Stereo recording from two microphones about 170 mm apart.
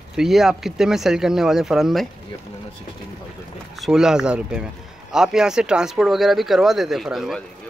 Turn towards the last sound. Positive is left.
turn(degrees=0)  # may be behind; listen again after turning